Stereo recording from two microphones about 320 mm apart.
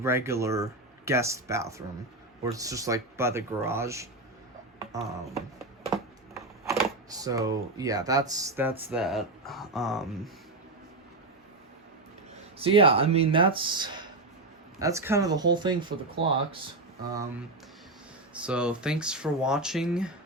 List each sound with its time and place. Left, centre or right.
0.0 s speech: centre
5.8 s speech: centre
12.5 s speech: centre
18.3 s speech: centre